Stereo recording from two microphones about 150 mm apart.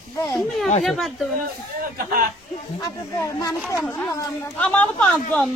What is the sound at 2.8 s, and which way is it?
Speech, 25° left (ahead or behind).